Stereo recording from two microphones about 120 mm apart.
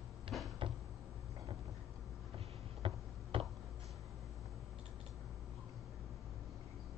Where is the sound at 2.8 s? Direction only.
50° right (ahead or behind).